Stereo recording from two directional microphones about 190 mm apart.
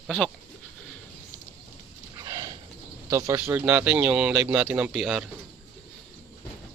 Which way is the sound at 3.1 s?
15° right (ahead or behind).